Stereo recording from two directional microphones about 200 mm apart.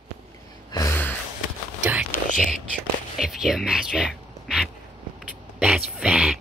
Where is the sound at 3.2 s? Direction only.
Centre (ahead or behind).